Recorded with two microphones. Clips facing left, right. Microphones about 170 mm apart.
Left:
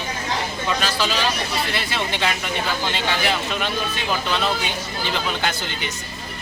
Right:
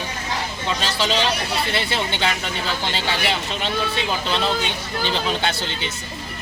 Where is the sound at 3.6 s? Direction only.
30° right (ahead or behind).